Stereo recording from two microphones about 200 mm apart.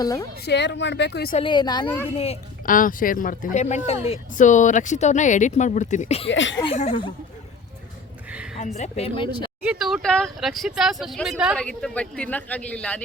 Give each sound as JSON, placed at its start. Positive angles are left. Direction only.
{"t": 0.0, "sound": "speech", "side_deg": 20}
{"t": 0.4, "sound": "speech", "side_deg": 60}
{"t": 1.4, "sound": "a woman's voice", "side_deg": 25}
{"t": 2.6, "sound": "speech", "side_deg": 45}
{"t": 6.2, "sound": "speech", "side_deg": 65}
{"t": 6.7, "sound": "speech", "side_deg": 35}
{"t": 8.5, "sound": "speech", "side_deg": 35}
{"t": 9.6, "sound": "speech", "side_deg": 0}